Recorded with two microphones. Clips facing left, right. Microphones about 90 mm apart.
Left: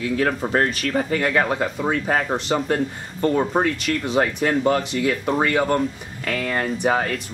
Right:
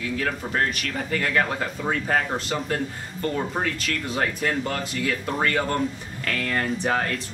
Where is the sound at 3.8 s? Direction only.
20° left (ahead or behind).